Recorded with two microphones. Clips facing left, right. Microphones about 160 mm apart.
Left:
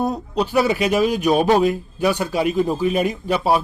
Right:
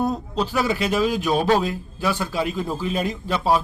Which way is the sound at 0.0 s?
10° left (ahead or behind).